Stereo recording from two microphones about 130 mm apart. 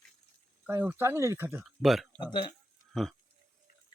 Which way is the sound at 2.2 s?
35° left (ahead or behind).